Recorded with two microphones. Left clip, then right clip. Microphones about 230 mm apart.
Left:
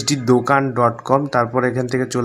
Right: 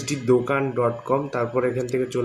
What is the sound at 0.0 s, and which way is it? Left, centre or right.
Speech, left.